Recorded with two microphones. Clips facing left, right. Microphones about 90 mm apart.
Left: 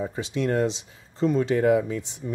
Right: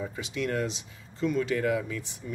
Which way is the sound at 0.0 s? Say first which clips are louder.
Left 5 dB; 30° left (ahead or behind).